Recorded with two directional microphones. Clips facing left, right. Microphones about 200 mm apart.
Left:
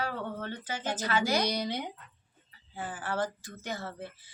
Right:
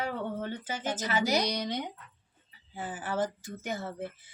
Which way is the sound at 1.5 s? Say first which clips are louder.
Even; 5° left (ahead or behind).